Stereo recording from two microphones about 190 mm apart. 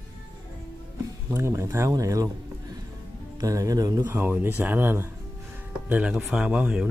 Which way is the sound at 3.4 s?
15° right (ahead or behind).